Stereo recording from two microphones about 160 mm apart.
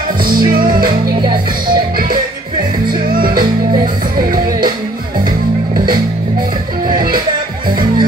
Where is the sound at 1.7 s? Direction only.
65° right (ahead or behind).